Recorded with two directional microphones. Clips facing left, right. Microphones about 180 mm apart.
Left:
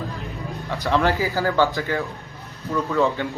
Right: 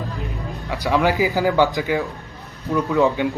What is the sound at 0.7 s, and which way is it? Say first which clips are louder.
A man's voice: right 2 dB; 15° right (ahead or behind).